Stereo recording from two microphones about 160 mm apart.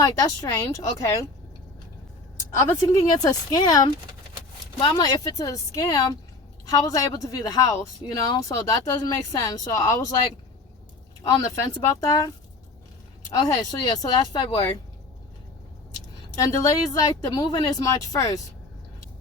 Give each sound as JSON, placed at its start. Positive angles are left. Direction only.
{"t": 0.0, "sound": "a woman's voice", "side_deg": 20}
{"t": 2.8, "sound": "a woman's voice", "side_deg": 25}
{"t": 11.9, "sound": "a woman's voice", "side_deg": 20}
{"t": 13.3, "sound": "a woman's voice", "side_deg": 25}
{"t": 16.3, "sound": "a woman's voice", "side_deg": 20}